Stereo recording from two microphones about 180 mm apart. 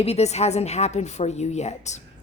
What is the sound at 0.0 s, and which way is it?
A woman's voice, 35° left (ahead or behind).